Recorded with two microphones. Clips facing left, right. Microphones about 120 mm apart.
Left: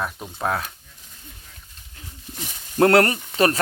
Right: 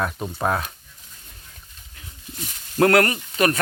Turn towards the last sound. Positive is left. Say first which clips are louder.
# left 1 dB
turn(degrees=30)  # may be behind; listen again after turning